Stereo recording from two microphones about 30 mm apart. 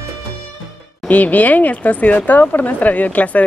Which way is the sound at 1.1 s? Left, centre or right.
Left.